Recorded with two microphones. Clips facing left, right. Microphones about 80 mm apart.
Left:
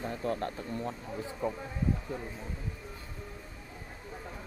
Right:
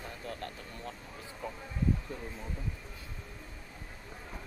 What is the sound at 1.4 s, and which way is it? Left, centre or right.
Speech, left.